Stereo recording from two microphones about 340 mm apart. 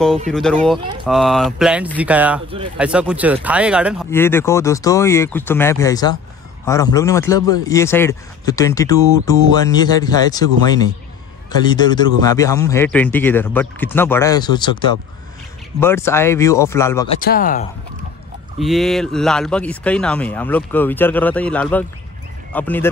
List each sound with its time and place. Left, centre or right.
0.3 s a man's voice: centre
11.6 s a man's voice: centre
17.2 s speech: left
18.6 s speech: centre